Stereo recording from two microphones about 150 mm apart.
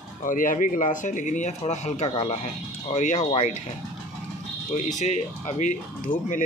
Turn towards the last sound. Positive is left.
turn(degrees=60)  # may be behind; listen again after turning